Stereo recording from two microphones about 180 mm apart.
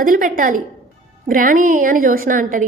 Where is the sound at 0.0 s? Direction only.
50° right (ahead or behind).